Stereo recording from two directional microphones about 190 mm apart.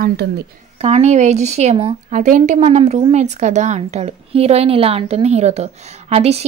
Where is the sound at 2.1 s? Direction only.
45° right (ahead or behind).